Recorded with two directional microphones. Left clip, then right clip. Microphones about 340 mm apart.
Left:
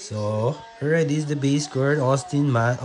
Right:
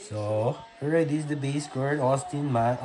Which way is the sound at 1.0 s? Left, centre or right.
Left.